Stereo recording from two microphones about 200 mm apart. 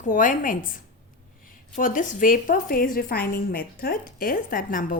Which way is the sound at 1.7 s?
40° left (ahead or behind).